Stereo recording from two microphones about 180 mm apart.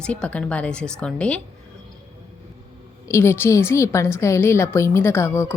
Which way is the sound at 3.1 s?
15° left (ahead or behind).